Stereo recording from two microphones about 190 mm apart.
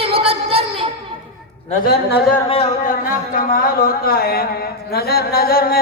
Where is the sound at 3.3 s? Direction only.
50° left (ahead or behind).